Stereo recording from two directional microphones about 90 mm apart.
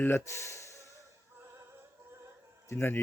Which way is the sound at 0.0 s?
30° left (ahead or behind).